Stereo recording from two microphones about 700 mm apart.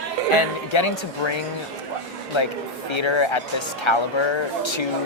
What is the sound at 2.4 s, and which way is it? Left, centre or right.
A man's voice, left.